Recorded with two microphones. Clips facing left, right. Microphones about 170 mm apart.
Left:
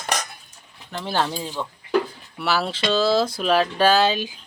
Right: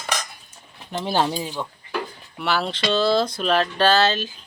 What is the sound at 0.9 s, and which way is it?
Speech, 15° right (ahead or behind).